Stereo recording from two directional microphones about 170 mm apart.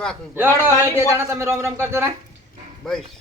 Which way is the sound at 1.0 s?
15° right (ahead or behind).